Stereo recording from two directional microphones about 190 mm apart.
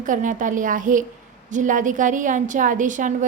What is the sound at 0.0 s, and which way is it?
A woman's voice, 45° right (ahead or behind).